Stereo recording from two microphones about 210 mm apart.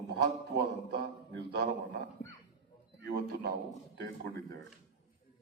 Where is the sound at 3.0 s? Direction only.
55° right (ahead or behind).